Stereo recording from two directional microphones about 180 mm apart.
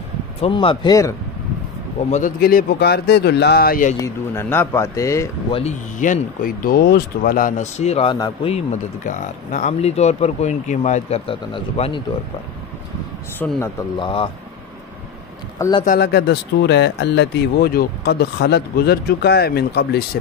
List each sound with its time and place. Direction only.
0.4 s speech: 30° left (ahead or behind)
2.0 s speech: 40° left (ahead or behind)
2.4 s speech: 60° left (ahead or behind)
4.0 s speech: 10° left (ahead or behind)
5.5 s speech: 35° left (ahead or behind)
13.4 s speech: 10° left (ahead or behind)
13.9 s speech: 30° left (ahead or behind)
15.8 s speech: 55° left (ahead or behind)